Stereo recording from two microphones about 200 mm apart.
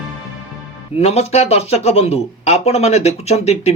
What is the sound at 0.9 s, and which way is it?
Speech, 30° left (ahead or behind).